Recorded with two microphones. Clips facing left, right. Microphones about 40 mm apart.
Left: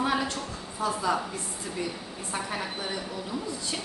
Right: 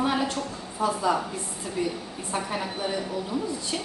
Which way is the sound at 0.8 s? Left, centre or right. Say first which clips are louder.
Right 3 dB; centre.